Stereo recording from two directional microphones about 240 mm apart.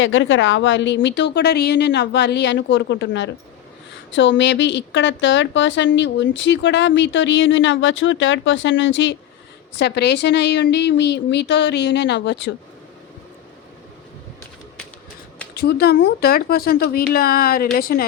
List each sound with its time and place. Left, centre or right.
0.0 s a woman's voice: left
15.5 s speech: left